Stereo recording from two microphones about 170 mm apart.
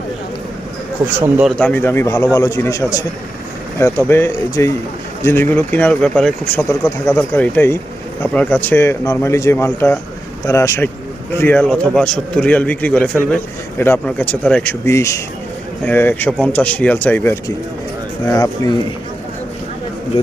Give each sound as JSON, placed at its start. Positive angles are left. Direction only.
{"t": 1.1, "sound": "speech", "side_deg": -10}
{"t": 1.5, "sound": "a man's voice", "side_deg": 10}